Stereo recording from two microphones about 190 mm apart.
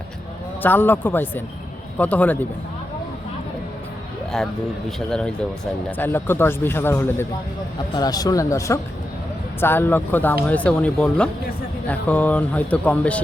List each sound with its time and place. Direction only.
0.6 s speech: 10° left (ahead or behind)
4.3 s speech: centre (ahead or behind)